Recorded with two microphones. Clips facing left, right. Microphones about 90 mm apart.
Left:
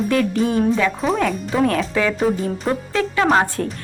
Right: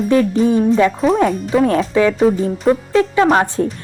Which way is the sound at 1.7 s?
25° right (ahead or behind).